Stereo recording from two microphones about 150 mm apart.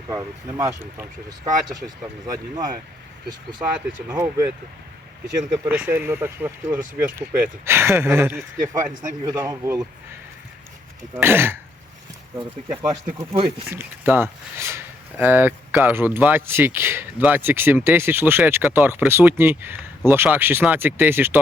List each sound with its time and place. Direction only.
0.1 s speech: 20° right (ahead or behind)
2.2 s speech: 25° right (ahead or behind)
4.1 s speech: 20° right (ahead or behind)
5.6 s speech: 10° right (ahead or behind)
11.1 s speech: 15° right (ahead or behind)
12.6 s speech: 25° right (ahead or behind)
13.7 s speech: 15° right (ahead or behind)